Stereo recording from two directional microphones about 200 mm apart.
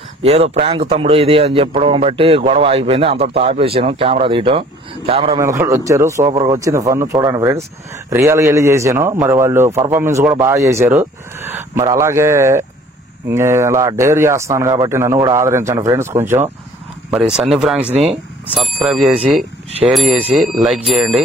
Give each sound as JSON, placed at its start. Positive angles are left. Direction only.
{"t": 0.2, "sound": "speech", "side_deg": -30}
{"t": 5.4, "sound": "speech", "side_deg": -15}